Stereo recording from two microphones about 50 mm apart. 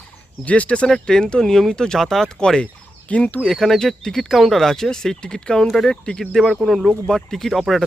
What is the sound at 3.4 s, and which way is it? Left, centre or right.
Speech, centre.